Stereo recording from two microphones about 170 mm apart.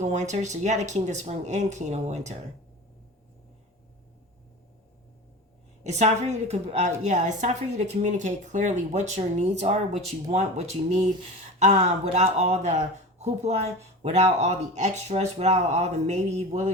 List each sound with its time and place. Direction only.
0.0 s a woman's voice: 45° right (ahead or behind)
5.8 s a woman's voice: 40° right (ahead or behind)